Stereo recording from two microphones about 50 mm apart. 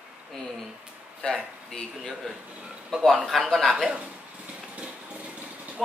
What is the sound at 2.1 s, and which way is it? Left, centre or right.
A man's voice, centre.